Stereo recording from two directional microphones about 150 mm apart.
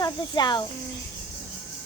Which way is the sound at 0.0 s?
30° left (ahead or behind).